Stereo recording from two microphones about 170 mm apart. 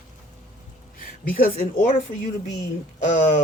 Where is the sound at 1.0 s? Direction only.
55° left (ahead or behind).